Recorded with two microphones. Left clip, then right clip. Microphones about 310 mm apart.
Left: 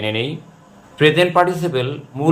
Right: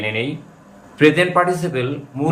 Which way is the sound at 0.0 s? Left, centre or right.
Centre.